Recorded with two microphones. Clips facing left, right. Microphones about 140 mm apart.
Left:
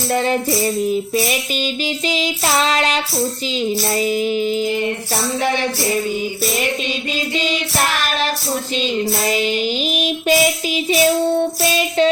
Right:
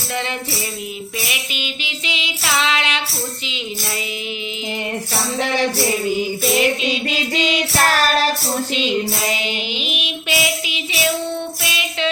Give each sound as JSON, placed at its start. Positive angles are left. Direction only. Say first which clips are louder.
{"t": 0.1, "sound": "music", "louder": "left 7 dB", "side_deg": 40}
{"t": 7.9, "sound": "child singing", "louder": "right 4 dB", "side_deg": -40}
{"t": 9.3, "sound": "child singing", "louder": "left 6 dB", "side_deg": 40}